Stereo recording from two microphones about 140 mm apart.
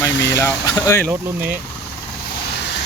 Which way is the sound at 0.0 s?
20° left (ahead or behind).